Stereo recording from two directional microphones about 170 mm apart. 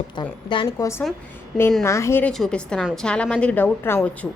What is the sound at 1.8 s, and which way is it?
Speech, 15° left (ahead or behind).